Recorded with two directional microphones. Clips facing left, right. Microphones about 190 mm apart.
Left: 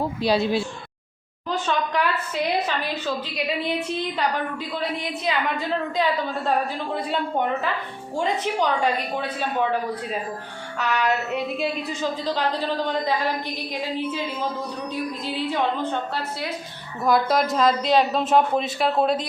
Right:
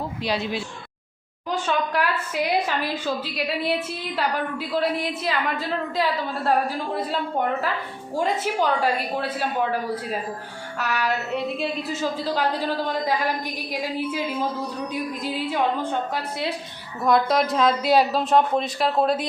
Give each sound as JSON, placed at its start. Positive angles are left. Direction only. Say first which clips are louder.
{"t": 0.2, "sound": "speech", "louder": "left 5 dB", "side_deg": 35}
{"t": 1.5, "sound": "a woman's voice", "louder": "even", "side_deg": -10}
{"t": 10.8, "sound": "a woman's voice", "louder": "left 2 dB", "side_deg": -5}
{"t": 15.2, "sound": "a woman's voice", "louder": "right 1 dB", "side_deg": -10}
{"t": 17.0, "sound": "a woman's voice", "louder": "even", "side_deg": 0}